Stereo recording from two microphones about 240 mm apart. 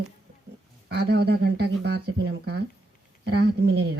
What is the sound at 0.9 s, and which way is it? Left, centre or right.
Speech, right.